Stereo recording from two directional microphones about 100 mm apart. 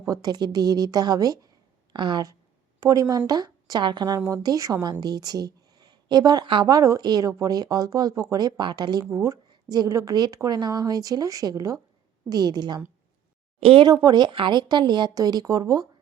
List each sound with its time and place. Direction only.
0.0 s a woman's voice: 35° right (ahead or behind)
1.9 s speech: 50° right (ahead or behind)
2.8 s a woman's voice: 35° right (ahead or behind)
4.2 s a woman's voice: 35° right (ahead or behind)
9.1 s a woman's voice: 30° right (ahead or behind)
13.6 s speech: 75° right (ahead or behind)
13.8 s speech: 40° right (ahead or behind)